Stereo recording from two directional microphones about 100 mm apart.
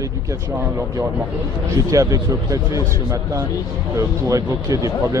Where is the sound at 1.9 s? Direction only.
35° right (ahead or behind).